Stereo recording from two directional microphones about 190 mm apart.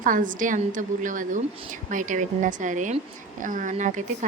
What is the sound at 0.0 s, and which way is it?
A woman's voice, 45° right (ahead or behind).